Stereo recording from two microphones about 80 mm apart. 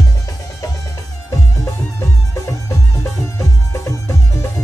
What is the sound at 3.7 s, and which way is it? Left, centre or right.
Music, left.